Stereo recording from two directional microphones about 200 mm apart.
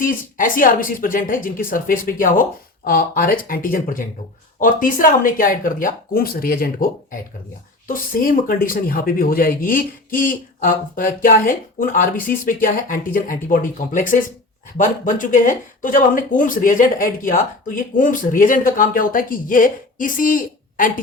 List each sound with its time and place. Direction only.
0.0 s speech: 45° left (ahead or behind)
7.9 s speech: 45° left (ahead or behind)